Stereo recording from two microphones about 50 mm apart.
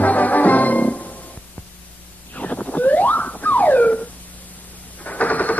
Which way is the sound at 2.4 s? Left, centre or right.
Left.